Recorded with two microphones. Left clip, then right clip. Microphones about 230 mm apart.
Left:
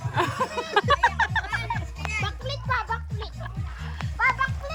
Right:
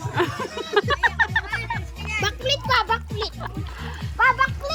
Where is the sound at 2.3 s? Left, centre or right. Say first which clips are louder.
Right 7 dB; right.